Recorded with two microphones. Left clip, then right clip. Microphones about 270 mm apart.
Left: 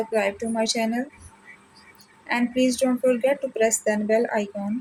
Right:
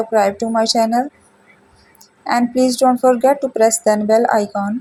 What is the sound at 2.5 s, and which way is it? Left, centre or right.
Speech, centre.